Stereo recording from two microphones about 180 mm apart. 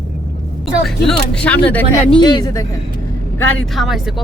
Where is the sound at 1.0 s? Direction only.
5° left (ahead or behind).